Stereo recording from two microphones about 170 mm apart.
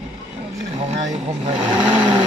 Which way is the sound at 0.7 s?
40° right (ahead or behind).